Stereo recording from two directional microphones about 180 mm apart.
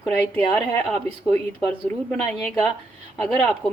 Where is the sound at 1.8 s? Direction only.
Centre (ahead or behind).